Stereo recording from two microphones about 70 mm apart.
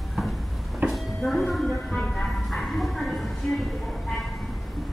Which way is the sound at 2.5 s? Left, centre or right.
Centre.